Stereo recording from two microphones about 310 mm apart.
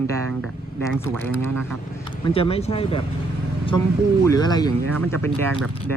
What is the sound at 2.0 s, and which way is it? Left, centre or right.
Speech, centre.